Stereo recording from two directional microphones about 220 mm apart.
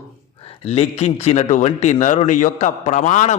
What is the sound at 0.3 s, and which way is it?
A man's voice, 25° left (ahead or behind).